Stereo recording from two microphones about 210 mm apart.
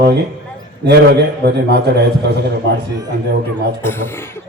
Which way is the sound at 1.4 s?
50° right (ahead or behind).